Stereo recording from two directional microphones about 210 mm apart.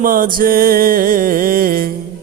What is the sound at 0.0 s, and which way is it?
Music, 40° right (ahead or behind).